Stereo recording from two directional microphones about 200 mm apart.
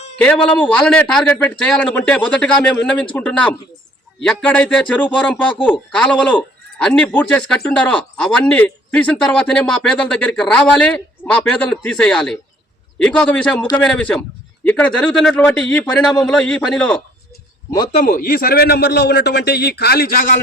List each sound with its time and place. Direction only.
0.2 s a man's voice: 5° left (ahead or behind)
17.9 s a man's voice: 40° left (ahead or behind)